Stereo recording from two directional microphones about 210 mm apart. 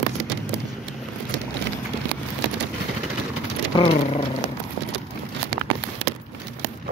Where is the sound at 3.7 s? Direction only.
25° left (ahead or behind).